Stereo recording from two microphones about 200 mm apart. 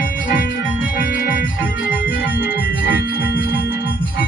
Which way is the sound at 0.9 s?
50° left (ahead or behind).